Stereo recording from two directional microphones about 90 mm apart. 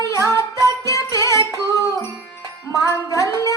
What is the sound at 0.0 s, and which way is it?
Carnatic music, 35° left (ahead or behind).